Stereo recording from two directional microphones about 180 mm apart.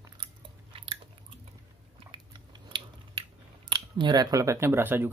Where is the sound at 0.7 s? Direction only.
30° right (ahead or behind).